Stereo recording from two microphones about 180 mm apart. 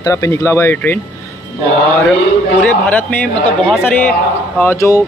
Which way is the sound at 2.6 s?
10° left (ahead or behind).